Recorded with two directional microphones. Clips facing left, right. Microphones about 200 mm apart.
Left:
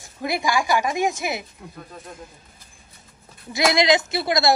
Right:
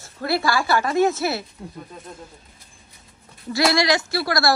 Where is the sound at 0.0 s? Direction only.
15° left (ahead or behind).